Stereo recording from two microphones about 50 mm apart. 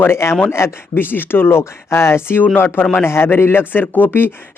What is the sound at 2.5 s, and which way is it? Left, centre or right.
Speech, left.